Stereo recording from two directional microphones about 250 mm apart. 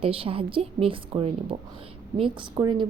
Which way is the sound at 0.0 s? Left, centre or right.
Right.